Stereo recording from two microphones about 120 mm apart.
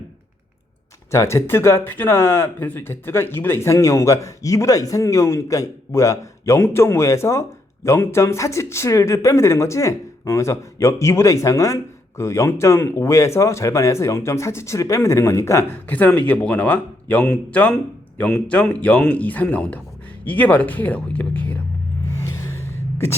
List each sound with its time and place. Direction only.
1.1 s speech: 25° left (ahead or behind)
22.1 s gasp: 25° left (ahead or behind)